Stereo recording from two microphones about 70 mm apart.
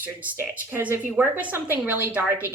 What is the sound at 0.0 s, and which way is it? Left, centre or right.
A woman's voice, right.